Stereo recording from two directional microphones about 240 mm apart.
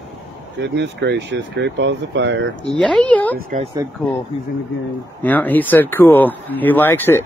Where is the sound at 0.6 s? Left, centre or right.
Right.